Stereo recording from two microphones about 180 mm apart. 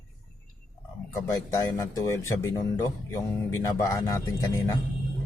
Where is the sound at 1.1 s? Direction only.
20° left (ahead or behind).